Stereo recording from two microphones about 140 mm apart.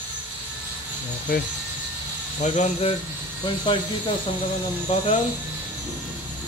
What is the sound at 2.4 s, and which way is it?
Speech, 55° left (ahead or behind).